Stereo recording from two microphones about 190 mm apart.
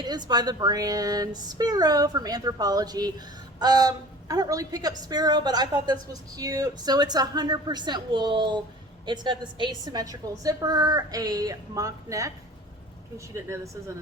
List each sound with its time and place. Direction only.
0.0 s a woman's voice: 20° right (ahead or behind)